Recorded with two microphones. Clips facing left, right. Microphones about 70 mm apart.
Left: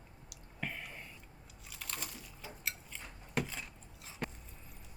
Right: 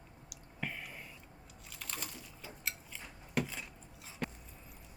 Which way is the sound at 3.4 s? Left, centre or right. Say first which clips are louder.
Even; centre.